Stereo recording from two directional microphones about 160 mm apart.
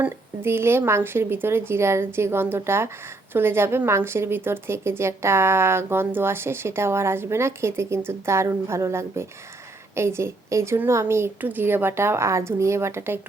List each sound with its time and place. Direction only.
0.0 s speech: 15° right (ahead or behind)